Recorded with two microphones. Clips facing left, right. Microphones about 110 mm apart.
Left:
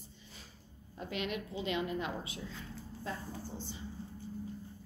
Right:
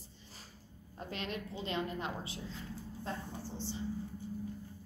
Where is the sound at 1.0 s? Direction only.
35° right (ahead or behind).